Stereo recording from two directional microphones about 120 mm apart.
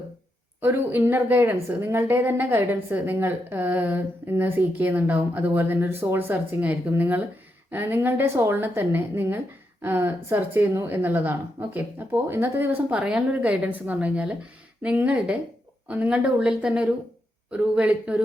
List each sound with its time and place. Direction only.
0.6 s a woman's voice: 20° right (ahead or behind)